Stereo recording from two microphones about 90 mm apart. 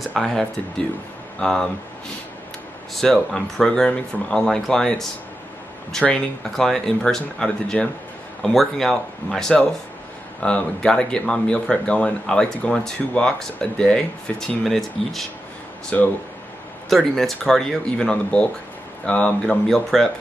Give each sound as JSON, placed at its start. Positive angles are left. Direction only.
{"t": 0.2, "sound": "speech", "side_deg": 0}
{"t": 1.4, "sound": "speech", "side_deg": 5}
{"t": 2.9, "sound": "speech", "side_deg": 0}
{"t": 6.0, "sound": "speech", "side_deg": 10}
{"t": 15.9, "sound": "speech", "side_deg": 15}
{"t": 16.9, "sound": "speech", "side_deg": 5}